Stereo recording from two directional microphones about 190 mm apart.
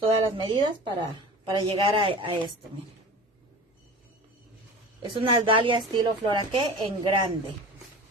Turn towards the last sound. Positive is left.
turn(degrees=-25)  # may be behind; listen again after turning